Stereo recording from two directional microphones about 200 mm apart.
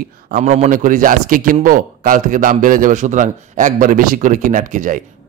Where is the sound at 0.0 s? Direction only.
45° right (ahead or behind).